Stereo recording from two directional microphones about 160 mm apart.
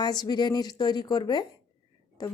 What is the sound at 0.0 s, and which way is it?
Speech, 25° left (ahead or behind).